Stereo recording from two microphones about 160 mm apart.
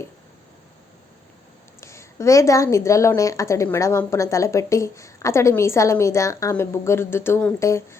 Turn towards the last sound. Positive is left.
turn(degrees=15)  # may be behind; listen again after turning